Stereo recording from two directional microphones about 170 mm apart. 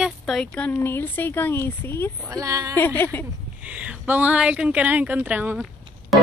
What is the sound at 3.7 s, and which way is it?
Speech, 10° right (ahead or behind).